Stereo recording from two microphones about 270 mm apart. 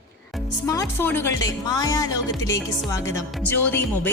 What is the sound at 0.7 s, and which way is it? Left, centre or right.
Speech, centre.